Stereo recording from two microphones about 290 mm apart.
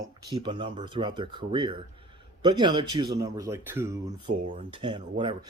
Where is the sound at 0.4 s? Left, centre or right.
Centre.